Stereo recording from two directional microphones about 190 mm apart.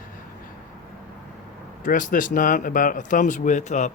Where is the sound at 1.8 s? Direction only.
45° left (ahead or behind).